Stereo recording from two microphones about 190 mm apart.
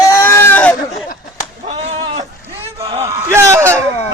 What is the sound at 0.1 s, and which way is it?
Goat, 15° left (ahead or behind).